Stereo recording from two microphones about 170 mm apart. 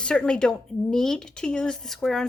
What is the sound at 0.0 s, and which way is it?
A woman's voice, 5° left (ahead or behind).